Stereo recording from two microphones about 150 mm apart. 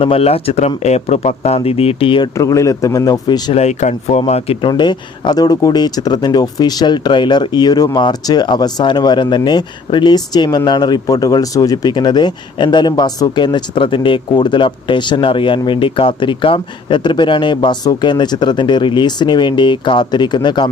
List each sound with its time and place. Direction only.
0.0 s speech: 40° left (ahead or behind)
2.4 s a man's voice: 20° left (ahead or behind)
3.5 s speech: 50° left (ahead or behind)
4.7 s speech: 30° left (ahead or behind)